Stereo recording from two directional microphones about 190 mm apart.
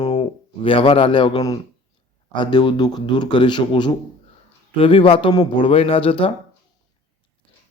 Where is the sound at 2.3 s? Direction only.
25° left (ahead or behind).